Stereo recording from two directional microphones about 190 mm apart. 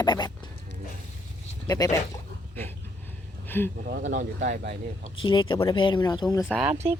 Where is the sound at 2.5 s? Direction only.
10° left (ahead or behind).